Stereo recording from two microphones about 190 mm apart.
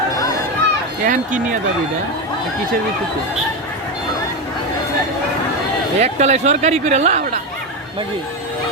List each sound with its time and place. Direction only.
1.0 s speech: 45° right (ahead or behind)
6.0 s speech: 35° right (ahead or behind)